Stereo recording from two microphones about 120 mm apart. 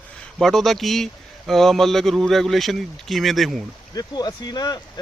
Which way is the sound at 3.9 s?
35° left (ahead or behind).